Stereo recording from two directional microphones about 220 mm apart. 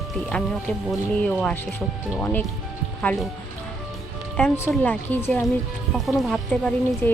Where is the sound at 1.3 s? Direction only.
10° left (ahead or behind).